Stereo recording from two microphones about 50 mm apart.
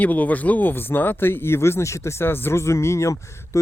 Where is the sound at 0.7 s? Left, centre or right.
Left.